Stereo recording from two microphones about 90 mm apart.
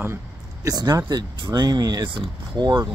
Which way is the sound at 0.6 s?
45° right (ahead or behind).